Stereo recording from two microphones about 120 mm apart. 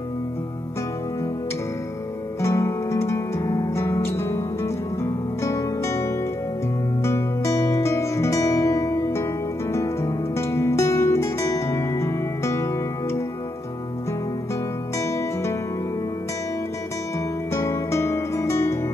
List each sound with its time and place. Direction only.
2.4 s music: 25° left (ahead or behind)
15.0 s music: 20° left (ahead or behind)
17.6 s music: 25° left (ahead or behind)